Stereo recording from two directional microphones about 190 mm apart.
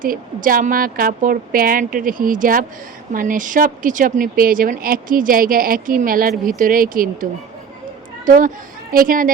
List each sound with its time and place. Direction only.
0.0 s speech: 45° right (ahead or behind)